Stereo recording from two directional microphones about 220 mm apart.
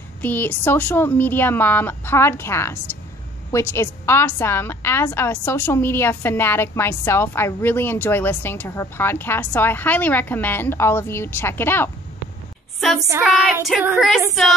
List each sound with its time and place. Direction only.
0.2 s a woman's voice: 10° left (ahead or behind)
13.2 s child singing: centre (ahead or behind)